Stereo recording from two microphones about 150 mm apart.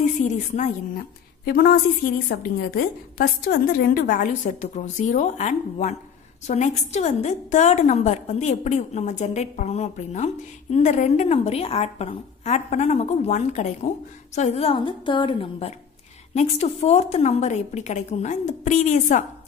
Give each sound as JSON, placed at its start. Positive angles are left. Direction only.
{"t": 0.9, "sound": "a woman's voice", "side_deg": 90}
{"t": 16.3, "sound": "a woman's voice", "side_deg": 50}